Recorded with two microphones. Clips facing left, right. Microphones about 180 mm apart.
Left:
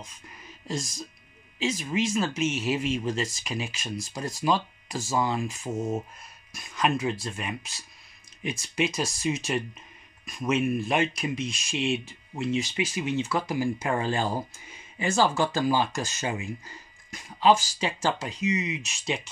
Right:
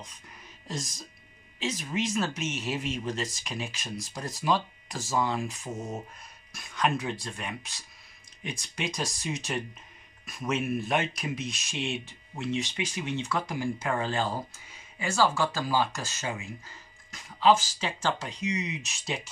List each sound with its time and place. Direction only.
0.7 s speech: centre (ahead or behind)